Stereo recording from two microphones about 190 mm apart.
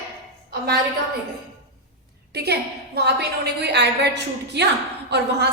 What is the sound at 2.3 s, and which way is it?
A woman's voice, 60° right (ahead or behind).